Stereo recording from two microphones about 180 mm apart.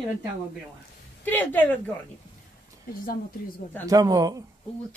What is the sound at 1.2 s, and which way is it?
Speech, 10° left (ahead or behind).